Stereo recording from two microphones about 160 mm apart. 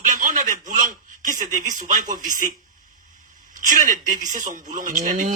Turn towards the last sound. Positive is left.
turn(degrees=-55)  # may be behind; listen again after turning